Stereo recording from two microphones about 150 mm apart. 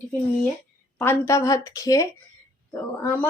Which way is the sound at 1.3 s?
20° left (ahead or behind).